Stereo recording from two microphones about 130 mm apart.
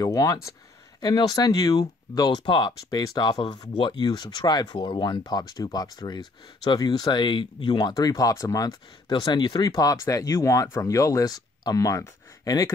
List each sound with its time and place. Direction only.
0.0 s speech: 25° left (ahead or behind)
7.9 s speech: 25° left (ahead or behind)